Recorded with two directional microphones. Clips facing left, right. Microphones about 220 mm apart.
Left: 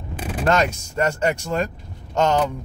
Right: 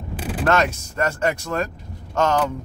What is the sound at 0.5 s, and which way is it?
Speech, 15° left (ahead or behind).